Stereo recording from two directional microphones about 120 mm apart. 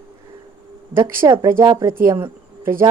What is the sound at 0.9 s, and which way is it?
Speech, 20° right (ahead or behind).